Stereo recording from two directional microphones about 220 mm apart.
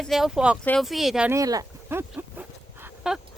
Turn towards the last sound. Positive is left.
turn(degrees=-5)  # may be behind; listen again after turning